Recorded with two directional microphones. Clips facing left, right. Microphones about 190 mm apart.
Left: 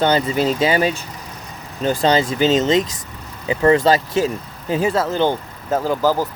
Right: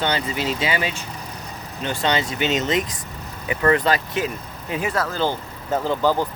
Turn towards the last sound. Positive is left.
turn(degrees=5)  # may be behind; listen again after turning